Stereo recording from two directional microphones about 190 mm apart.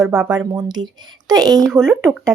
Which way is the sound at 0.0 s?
5° right (ahead or behind).